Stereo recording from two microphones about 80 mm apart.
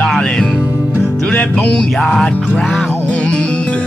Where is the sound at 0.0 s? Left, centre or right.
Centre.